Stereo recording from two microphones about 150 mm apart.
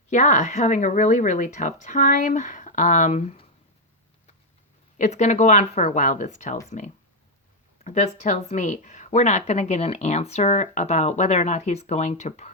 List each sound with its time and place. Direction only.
0.1 s speech: 55° left (ahead or behind)
4.9 s speech: 50° left (ahead or behind)